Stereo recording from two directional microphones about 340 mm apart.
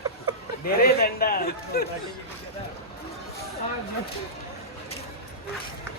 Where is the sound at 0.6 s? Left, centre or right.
Left.